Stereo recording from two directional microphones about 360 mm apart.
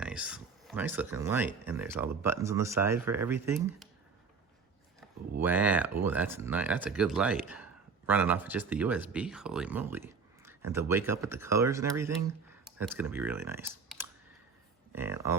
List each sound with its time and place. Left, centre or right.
0.0 s a sound: centre
1.6 s speech: centre
5.4 s speech: centre